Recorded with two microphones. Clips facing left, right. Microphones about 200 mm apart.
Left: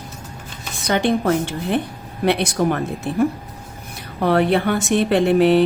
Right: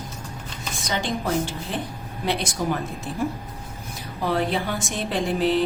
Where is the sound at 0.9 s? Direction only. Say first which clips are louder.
Left 8 dB; 60° left (ahead or behind).